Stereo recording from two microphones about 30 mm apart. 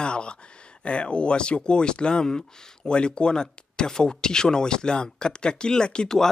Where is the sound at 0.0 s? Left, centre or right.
Left.